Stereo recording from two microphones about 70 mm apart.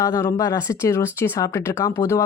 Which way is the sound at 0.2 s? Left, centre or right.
Left.